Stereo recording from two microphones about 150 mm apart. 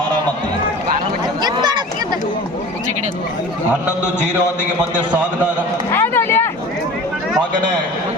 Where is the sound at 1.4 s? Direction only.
25° right (ahead or behind).